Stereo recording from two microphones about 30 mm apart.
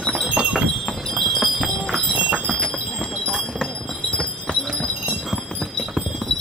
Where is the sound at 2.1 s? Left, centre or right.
Right.